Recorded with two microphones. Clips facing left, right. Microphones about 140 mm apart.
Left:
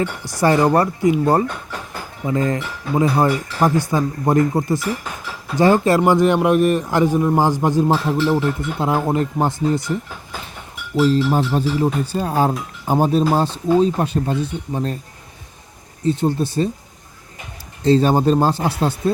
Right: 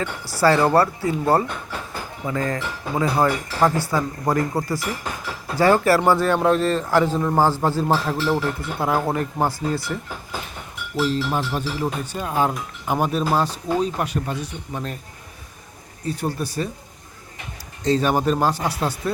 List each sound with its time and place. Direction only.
0.0 s a man's voice: 20° left (ahead or behind)
11.0 s speech: 35° left (ahead or behind)
16.0 s speech: 25° left (ahead or behind)
17.8 s speech: 30° left (ahead or behind)